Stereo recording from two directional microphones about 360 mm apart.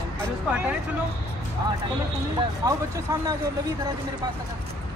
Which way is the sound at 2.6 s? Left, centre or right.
Centre.